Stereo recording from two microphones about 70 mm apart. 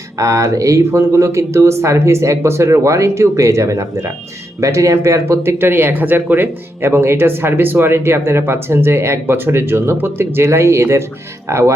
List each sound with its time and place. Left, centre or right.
0.2 s speech: right